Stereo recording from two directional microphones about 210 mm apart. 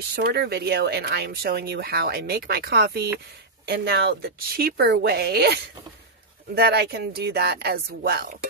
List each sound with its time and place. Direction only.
0.1 s speech: 50° right (ahead or behind)